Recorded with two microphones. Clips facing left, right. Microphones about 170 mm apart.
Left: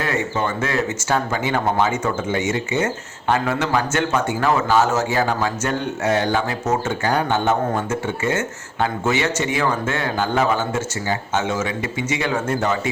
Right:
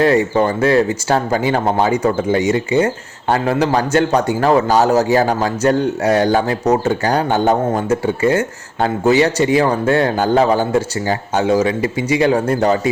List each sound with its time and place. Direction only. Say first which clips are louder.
0.0 s speech: right 9 dB; 35° right (ahead or behind)